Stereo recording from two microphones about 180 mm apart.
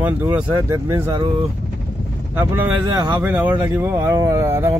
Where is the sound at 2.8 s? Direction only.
25° right (ahead or behind).